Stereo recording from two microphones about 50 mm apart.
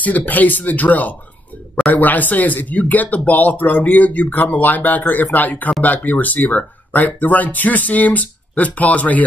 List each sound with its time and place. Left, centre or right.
0.0 s speech: left